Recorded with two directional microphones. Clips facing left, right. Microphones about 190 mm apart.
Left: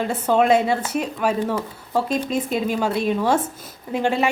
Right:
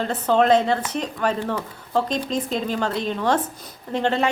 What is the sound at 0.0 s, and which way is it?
A woman's voice, 10° left (ahead or behind).